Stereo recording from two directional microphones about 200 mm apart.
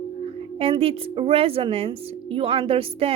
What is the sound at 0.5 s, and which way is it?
Speech, 30° right (ahead or behind).